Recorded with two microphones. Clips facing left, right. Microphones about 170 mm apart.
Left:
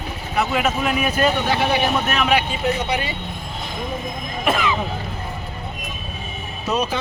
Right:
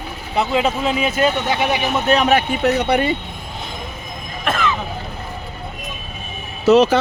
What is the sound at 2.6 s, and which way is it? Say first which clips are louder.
Speech: right 6 dB; 60° right (ahead or behind).